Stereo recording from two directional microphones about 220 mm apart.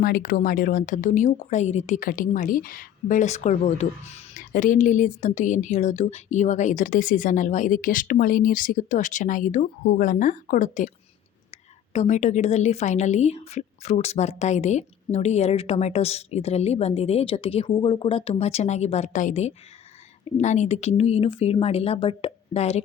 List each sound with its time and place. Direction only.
0.0 s speech: 40° left (ahead or behind)
11.9 s a woman's voice: 35° left (ahead or behind)